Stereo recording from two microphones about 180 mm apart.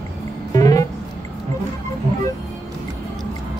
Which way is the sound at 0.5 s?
20° left (ahead or behind).